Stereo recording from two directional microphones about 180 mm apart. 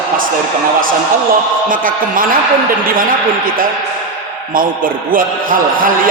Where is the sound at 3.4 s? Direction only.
50° right (ahead or behind).